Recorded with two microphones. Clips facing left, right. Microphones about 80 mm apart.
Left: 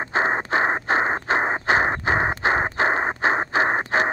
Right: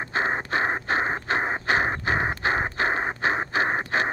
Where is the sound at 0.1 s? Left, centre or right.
Left.